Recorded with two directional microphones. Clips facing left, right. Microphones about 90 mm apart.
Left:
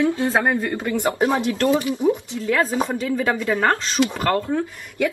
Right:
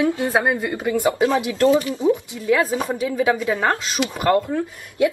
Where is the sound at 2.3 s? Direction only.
10° right (ahead or behind).